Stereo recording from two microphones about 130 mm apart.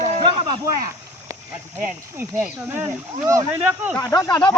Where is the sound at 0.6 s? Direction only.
25° right (ahead or behind).